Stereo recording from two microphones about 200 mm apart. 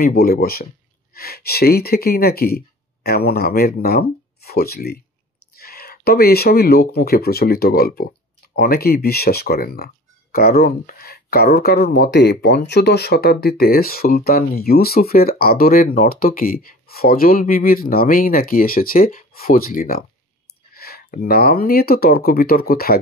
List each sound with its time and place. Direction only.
0.0 s speech: 50° left (ahead or behind)